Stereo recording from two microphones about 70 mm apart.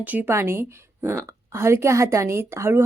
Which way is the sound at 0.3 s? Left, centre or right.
Right.